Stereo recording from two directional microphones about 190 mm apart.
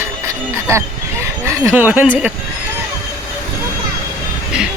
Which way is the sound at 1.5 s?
10° right (ahead or behind).